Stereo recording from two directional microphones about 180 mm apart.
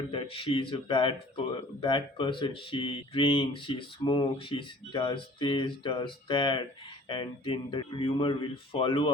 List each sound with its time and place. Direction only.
0.1 s speech: 30° left (ahead or behind)